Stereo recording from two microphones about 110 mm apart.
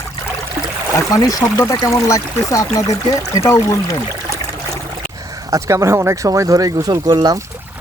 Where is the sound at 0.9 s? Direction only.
35° left (ahead or behind).